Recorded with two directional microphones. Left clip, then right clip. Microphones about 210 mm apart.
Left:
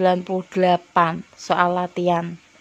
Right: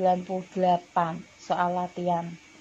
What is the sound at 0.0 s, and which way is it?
Speech, 35° left (ahead or behind).